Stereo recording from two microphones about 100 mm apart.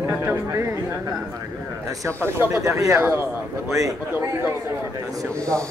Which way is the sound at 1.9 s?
35° right (ahead or behind).